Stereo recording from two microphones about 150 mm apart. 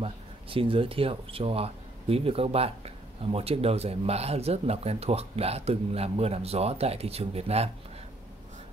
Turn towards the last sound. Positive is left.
turn(degrees=-45)  # may be behind; listen again after turning